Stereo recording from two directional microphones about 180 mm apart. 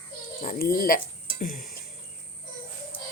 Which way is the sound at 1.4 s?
50° left (ahead or behind).